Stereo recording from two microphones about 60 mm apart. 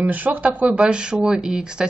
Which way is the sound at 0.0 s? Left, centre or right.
Right.